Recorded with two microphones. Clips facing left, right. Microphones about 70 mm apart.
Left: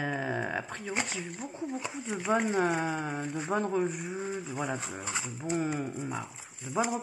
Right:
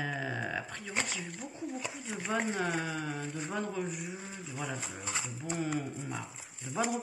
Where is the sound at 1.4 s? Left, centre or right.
Left.